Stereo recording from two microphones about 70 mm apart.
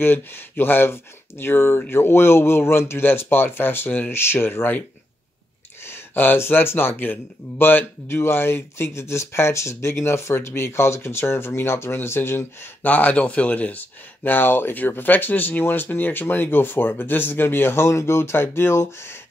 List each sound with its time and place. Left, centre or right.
0.0 s speech: left
5.9 s speech: left
12.8 s speech: left